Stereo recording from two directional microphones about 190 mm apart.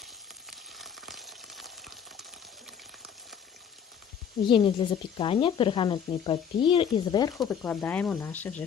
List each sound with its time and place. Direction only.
0.5 s frying: centre (ahead or behind)
4.4 s speech: 25° left (ahead or behind)
7.4 s speech: 10° left (ahead or behind)